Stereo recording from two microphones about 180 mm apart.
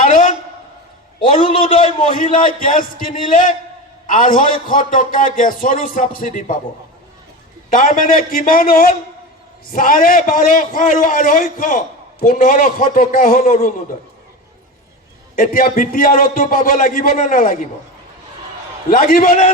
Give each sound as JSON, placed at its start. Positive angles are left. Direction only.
{"t": 0.0, "sound": "a sound", "side_deg": 45}
{"t": 1.4, "sound": "a sound", "side_deg": 45}
{"t": 2.0, "sound": "a man's voice", "side_deg": 45}
{"t": 7.7, "sound": "a man's voice", "side_deg": 50}
{"t": 15.4, "sound": "a man's voice", "side_deg": 55}
{"t": 18.9, "sound": "a man's voice", "side_deg": 50}